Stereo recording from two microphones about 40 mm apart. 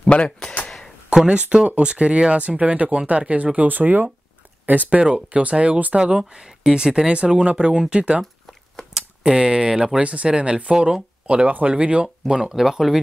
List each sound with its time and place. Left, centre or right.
0.1 s speech: left
0.7 s a sound: centre
1.1 s speech: right
5.1 s speech: right
5.9 s speech: right
8.9 s speech: centre
11.4 s speech: right
11.7 s speech: right; by 13.0 s centre